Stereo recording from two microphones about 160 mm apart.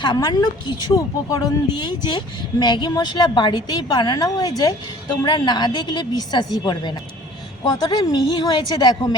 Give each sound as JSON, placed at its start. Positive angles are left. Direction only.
{"t": 0.0, "sound": "a woman's voice", "side_deg": 25}